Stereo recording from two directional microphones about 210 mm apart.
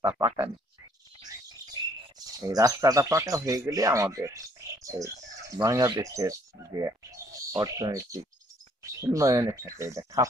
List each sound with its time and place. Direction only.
0.0 s speech: 15° right (ahead or behind)
2.1 s speech: 15° right (ahead or behind)